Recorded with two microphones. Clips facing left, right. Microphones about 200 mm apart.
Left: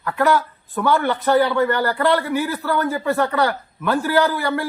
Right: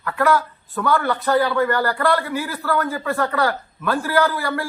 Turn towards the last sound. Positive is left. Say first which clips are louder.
# left 1 dB
turn(degrees=20)  # may be behind; listen again after turning